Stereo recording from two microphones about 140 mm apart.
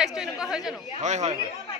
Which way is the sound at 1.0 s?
55° right (ahead or behind).